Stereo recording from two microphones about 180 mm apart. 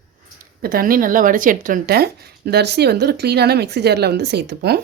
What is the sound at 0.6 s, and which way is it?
Speech, 55° right (ahead or behind).